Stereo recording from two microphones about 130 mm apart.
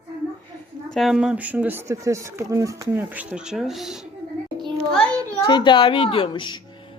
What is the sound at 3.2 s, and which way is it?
Speech, 10° right (ahead or behind).